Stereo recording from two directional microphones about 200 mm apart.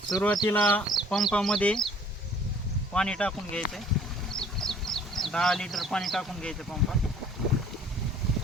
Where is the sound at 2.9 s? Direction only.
5° left (ahead or behind).